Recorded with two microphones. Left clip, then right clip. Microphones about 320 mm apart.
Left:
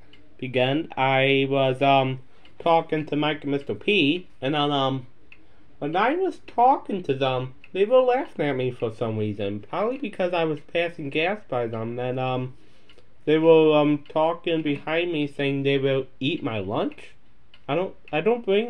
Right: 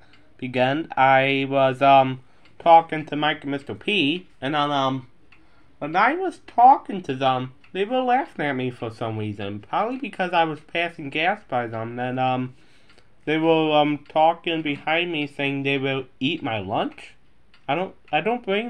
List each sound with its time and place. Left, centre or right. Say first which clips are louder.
0.4 s speech: right 1 dB; right